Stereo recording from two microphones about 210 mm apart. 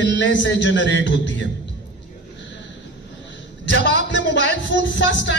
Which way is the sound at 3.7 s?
55° left (ahead or behind).